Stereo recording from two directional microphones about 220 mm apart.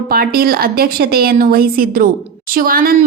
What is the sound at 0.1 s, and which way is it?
A woman's voice, 45° right (ahead or behind).